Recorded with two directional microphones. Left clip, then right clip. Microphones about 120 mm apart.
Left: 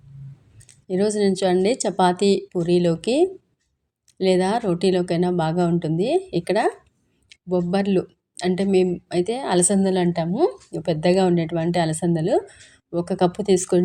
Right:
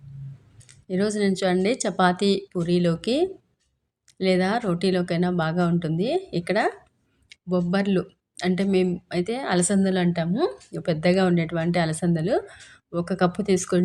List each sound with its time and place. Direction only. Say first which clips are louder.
0.7 s speech: left 4 dB; 30° left (ahead or behind)